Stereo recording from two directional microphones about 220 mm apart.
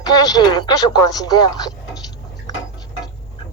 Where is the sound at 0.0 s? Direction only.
15° left (ahead or behind).